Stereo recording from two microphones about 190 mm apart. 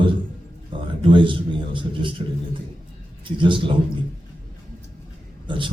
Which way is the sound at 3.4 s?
25° right (ahead or behind).